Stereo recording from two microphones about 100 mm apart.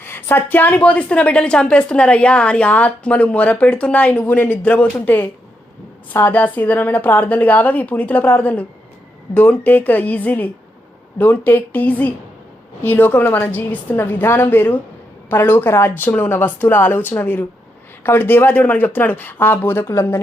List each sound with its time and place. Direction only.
0.0 s a woman's voice: 20° left (ahead or behind)